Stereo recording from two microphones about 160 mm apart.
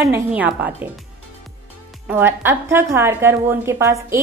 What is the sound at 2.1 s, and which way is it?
A woman's voice, 15° right (ahead or behind).